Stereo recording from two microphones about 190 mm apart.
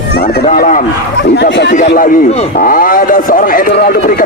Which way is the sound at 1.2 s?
65° left (ahead or behind).